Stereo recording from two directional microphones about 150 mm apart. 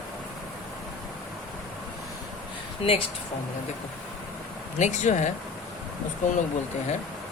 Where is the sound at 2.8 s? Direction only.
40° left (ahead or behind).